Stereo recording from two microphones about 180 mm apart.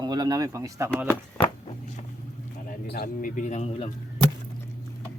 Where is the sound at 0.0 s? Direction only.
25° right (ahead or behind).